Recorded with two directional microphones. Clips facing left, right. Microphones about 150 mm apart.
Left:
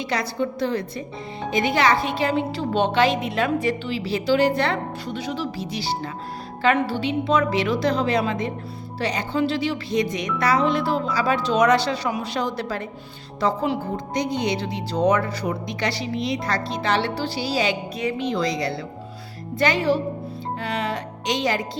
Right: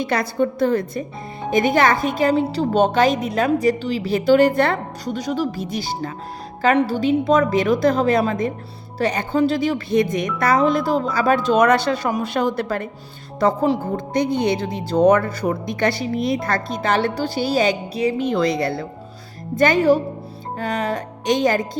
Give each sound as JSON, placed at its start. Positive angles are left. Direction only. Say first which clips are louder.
{"t": 0.0, "sound": "a woman's voice", "louder": "right 5 dB", "side_deg": -55}